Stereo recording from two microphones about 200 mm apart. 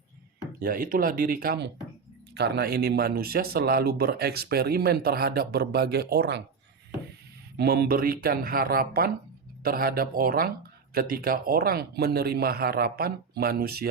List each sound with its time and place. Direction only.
0.6 s speech: 45° right (ahead or behind)
7.5 s speech: 50° right (ahead or behind)